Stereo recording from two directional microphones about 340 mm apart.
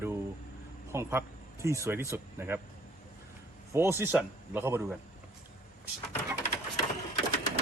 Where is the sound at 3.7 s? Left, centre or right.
Centre.